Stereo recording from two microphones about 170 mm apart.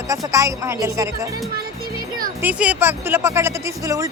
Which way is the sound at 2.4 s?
10° right (ahead or behind).